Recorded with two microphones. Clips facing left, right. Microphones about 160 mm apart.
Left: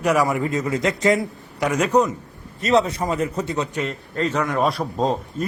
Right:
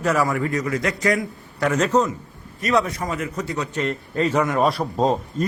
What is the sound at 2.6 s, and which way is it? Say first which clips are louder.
A man's voice: left 3 dB; 25° left (ahead or behind).